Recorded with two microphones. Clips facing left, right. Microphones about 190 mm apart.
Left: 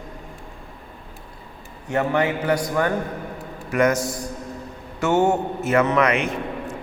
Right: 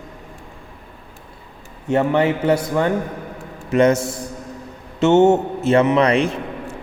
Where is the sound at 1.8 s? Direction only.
25° right (ahead or behind).